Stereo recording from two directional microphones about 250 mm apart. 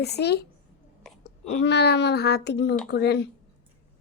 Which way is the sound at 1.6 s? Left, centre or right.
Left.